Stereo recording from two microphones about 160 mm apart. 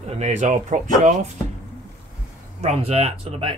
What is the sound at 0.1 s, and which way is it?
Speech, 45° right (ahead or behind).